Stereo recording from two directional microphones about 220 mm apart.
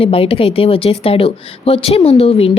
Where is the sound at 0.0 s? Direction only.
25° left (ahead or behind).